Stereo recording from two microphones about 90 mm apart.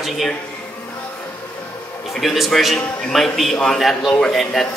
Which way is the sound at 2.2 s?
Centre (ahead or behind).